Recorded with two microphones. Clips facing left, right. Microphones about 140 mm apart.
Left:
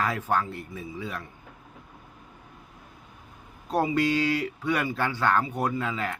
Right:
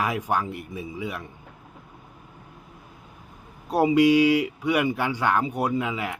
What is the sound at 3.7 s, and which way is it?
Speech, 15° right (ahead or behind).